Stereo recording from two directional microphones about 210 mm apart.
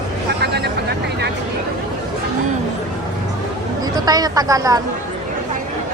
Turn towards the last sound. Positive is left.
turn(degrees=-15)  # may be behind; listen again after turning